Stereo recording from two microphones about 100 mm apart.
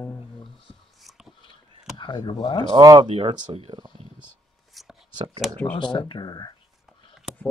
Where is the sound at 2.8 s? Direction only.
40° right (ahead or behind).